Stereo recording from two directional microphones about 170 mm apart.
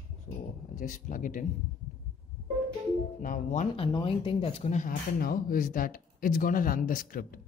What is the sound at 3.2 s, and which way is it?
Speech, 50° left (ahead or behind).